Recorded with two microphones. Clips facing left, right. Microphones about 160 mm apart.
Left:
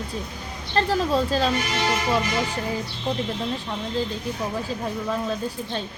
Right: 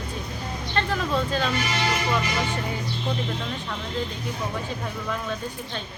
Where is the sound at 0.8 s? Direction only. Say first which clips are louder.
Left 4 dB; 35° left (ahead or behind).